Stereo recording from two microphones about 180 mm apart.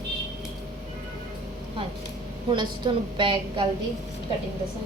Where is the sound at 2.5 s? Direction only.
25° right (ahead or behind).